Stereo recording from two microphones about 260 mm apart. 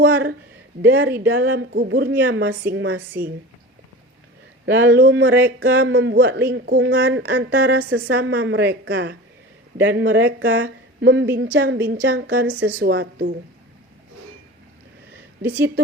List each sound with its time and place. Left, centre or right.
0.0 s speech: right
4.6 s speech: right
15.4 s a woman's voice: centre